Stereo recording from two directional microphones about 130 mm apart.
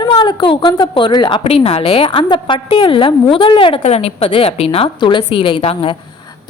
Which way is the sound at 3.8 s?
55° left (ahead or behind).